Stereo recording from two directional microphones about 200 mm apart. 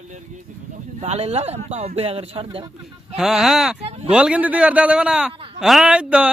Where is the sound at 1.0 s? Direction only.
30° right (ahead or behind).